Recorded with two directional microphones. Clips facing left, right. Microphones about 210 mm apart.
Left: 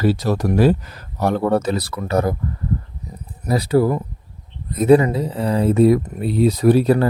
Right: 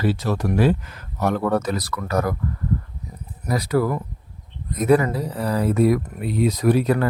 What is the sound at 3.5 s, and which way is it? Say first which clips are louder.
Speech: left 4 dB; 30° left (ahead or behind).